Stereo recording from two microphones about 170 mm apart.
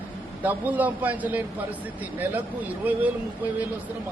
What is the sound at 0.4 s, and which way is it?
Speech, 10° right (ahead or behind).